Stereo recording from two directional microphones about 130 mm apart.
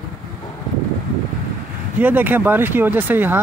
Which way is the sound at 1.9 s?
15° right (ahead or behind).